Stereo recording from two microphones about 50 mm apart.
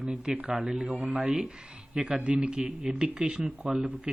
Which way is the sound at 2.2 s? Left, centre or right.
Right.